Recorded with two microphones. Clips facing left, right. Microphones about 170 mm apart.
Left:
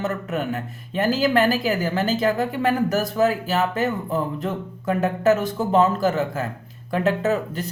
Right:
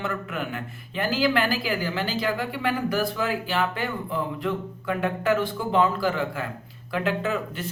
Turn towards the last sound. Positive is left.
turn(degrees=40)  # may be behind; listen again after turning